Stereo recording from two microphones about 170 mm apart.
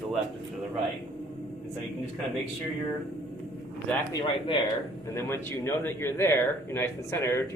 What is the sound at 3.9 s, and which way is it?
Speech, 10° left (ahead or behind).